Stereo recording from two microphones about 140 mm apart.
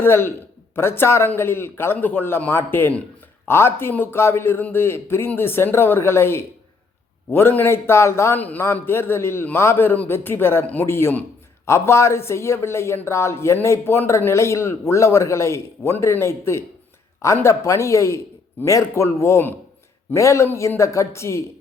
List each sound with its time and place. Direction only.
0.0 s a man's voice: 15° left (ahead or behind)